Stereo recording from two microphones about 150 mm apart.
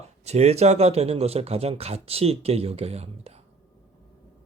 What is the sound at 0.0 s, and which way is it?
Speech, 45° right (ahead or behind).